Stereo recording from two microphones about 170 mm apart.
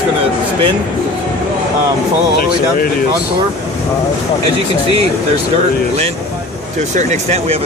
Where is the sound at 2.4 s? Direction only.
60° left (ahead or behind).